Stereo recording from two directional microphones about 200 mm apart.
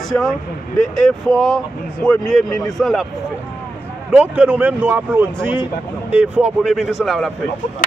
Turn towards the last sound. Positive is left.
turn(degrees=0)  # may be behind; listen again after turning